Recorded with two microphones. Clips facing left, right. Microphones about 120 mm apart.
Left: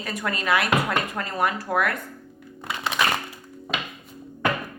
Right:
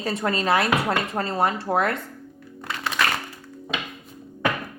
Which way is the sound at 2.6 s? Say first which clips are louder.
Even; 15° left (ahead or behind).